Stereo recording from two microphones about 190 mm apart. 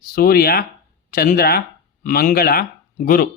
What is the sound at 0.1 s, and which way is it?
Speech, 50° left (ahead or behind).